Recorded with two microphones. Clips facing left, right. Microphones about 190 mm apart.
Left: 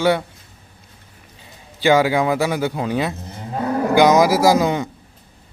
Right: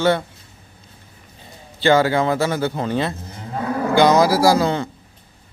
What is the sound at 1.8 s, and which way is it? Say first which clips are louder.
A man's voice: even; 15° left (ahead or behind).